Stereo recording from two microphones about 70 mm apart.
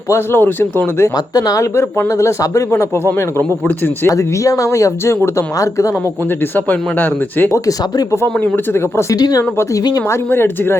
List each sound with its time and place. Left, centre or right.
0.1 s speech: left
1.1 s speech: left
1.7 s speech: left
4.1 s speech: left
6.7 s speech: left
7.5 s speech: left
8.1 s speech: left
9.1 s speech: left
10.2 s speech: left